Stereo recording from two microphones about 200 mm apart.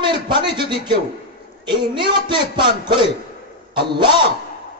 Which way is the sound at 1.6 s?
25° right (ahead or behind).